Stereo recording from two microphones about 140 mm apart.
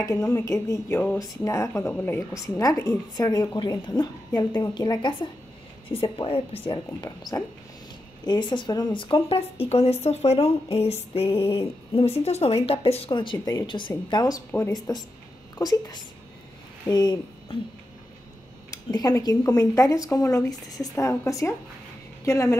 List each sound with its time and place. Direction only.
0.0 s speech: 25° left (ahead or behind)
18.7 s a woman's voice: 25° left (ahead or behind)